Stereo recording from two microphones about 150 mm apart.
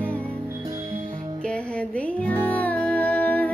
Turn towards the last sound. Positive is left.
turn(degrees=10)  # may be behind; listen again after turning